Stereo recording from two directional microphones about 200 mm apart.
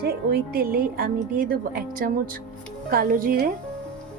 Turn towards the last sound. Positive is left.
turn(degrees=-45)  # may be behind; listen again after turning